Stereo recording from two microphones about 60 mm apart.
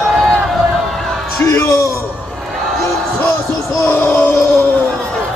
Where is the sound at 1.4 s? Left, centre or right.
Left.